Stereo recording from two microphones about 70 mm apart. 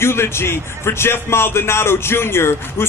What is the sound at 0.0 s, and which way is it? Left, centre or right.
Speech, left.